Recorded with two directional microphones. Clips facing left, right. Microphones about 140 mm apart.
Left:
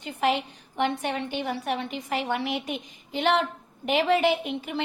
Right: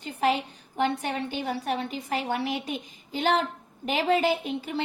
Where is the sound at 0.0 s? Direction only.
35° right (ahead or behind).